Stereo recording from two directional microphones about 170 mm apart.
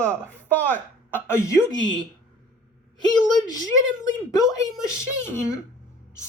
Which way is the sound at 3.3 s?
20° left (ahead or behind).